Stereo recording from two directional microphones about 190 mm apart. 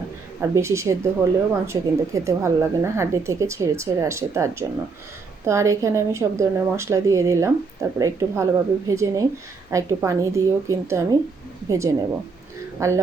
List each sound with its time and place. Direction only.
0.5 s speech: 15° right (ahead or behind)
5.5 s speech: 15° right (ahead or behind)